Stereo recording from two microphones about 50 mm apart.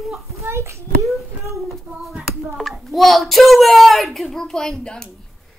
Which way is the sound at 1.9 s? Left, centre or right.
Right.